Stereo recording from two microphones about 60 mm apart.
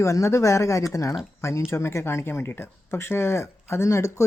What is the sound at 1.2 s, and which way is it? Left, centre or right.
Speech, left.